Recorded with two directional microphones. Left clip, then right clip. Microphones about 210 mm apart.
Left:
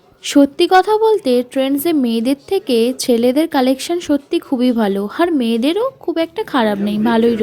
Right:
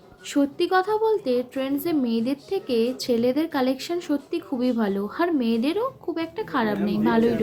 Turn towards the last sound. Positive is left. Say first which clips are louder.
# left 7 dB
turn(degrees=35)  # may be behind; listen again after turning